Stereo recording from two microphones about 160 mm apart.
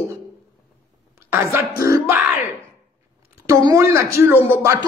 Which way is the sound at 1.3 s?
15° right (ahead or behind).